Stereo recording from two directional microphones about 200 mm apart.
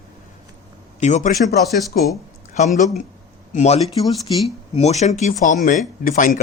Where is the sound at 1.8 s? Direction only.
Centre (ahead or behind).